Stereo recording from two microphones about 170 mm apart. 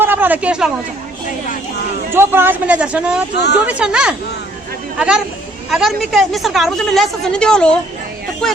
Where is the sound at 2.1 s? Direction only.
15° right (ahead or behind).